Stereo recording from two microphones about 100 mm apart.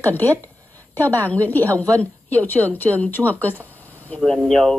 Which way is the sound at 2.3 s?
15° left (ahead or behind).